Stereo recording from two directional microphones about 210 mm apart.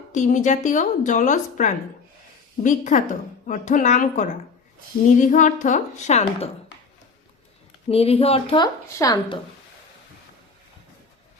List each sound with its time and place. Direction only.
0.1 s speech: 35° left (ahead or behind)
7.9 s a woman's voice: 30° left (ahead or behind)